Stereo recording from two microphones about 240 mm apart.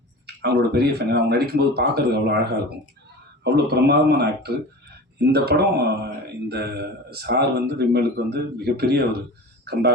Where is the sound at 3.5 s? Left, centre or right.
Right.